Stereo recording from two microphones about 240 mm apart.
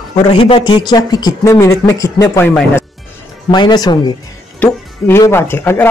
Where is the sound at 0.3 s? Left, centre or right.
Left.